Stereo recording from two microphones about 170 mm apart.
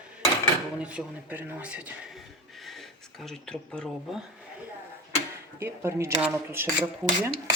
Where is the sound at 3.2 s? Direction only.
5° left (ahead or behind).